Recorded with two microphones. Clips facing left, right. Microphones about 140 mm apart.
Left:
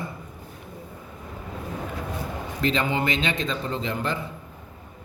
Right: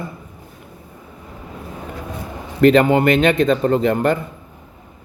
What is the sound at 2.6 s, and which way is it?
A man's voice, 55° right (ahead or behind).